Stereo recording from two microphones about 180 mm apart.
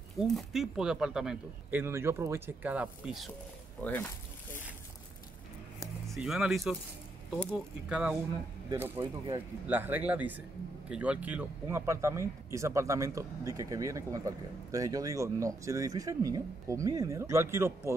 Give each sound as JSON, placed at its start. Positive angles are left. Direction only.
{"t": 0.4, "sound": "speech", "side_deg": 0}
{"t": 3.8, "sound": "speech", "side_deg": 10}
{"t": 6.0, "sound": "speech", "side_deg": 0}